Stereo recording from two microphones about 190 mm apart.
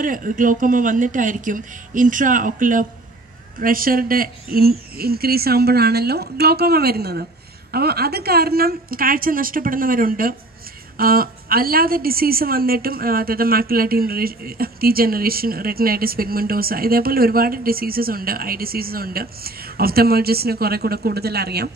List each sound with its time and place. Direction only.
0.0 s a woman's voice: 45° right (ahead or behind)